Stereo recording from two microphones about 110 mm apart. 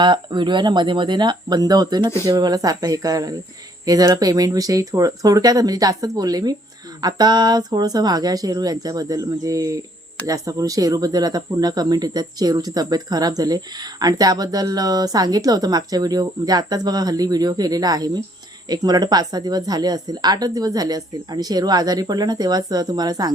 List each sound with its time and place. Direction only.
0.0 s speech: 45° right (ahead or behind)